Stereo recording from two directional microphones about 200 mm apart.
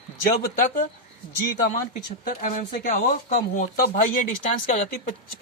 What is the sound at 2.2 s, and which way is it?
Speech, 40° left (ahead or behind).